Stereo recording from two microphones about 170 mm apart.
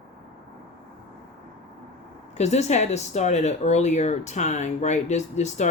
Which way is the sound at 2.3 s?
40° left (ahead or behind).